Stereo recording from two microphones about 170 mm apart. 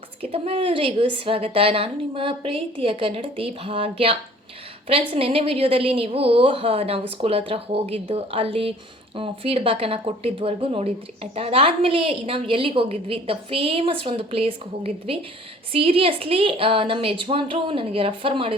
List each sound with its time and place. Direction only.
0.2 s speech: 35° right (ahead or behind)